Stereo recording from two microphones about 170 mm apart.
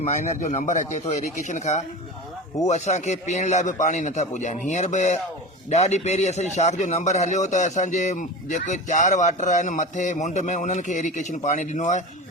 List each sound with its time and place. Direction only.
0.0 s a man's voice: 40° left (ahead or behind)